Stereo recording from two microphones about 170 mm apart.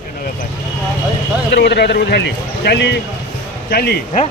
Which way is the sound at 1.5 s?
75° left (ahead or behind).